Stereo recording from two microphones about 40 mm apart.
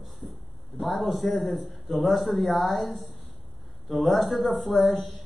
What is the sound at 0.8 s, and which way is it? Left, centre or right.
A man's voice, centre.